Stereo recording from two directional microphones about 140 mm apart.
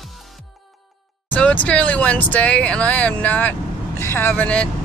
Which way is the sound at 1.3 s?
10° left (ahead or behind).